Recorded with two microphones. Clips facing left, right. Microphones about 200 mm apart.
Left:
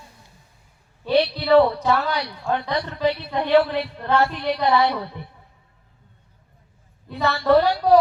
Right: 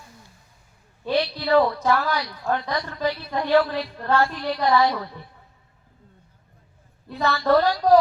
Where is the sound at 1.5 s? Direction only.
30° left (ahead or behind).